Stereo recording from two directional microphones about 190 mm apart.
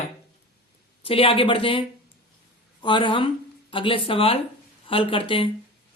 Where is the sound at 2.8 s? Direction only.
25° left (ahead or behind).